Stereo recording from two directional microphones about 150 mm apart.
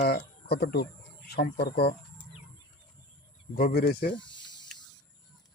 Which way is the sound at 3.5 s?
85° left.